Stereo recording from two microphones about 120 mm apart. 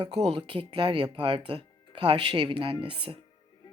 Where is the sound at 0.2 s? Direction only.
50° right (ahead or behind).